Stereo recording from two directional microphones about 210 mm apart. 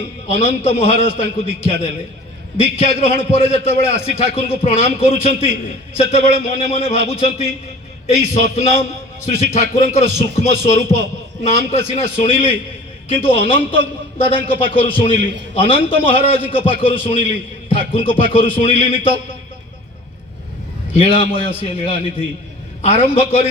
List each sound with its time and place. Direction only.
0.4 s a man's voice: 30° left (ahead or behind)
20.9 s a man's voice: 25° left (ahead or behind)